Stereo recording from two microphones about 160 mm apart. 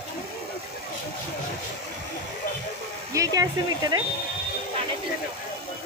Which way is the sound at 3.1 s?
20° right (ahead or behind).